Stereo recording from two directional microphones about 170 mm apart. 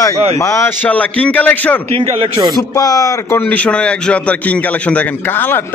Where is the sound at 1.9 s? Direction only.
35° right (ahead or behind).